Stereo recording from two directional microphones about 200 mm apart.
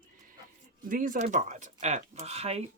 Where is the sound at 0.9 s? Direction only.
45° right (ahead or behind).